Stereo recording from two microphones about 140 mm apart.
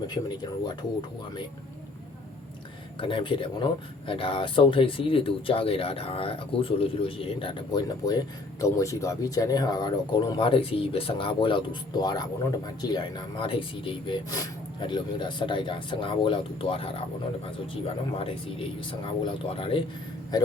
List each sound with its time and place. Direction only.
0.1 s speech: 30° left (ahead or behind)
3.0 s speech: 35° left (ahead or behind)